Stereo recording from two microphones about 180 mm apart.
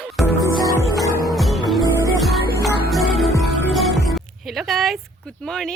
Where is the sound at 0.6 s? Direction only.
20° left (ahead or behind).